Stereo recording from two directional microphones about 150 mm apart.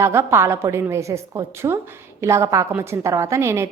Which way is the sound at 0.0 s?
15° right (ahead or behind).